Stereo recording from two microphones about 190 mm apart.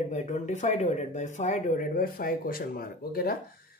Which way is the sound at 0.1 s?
40° left (ahead or behind).